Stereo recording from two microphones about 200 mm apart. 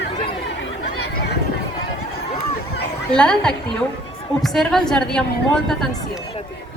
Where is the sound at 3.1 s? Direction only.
5° left (ahead or behind).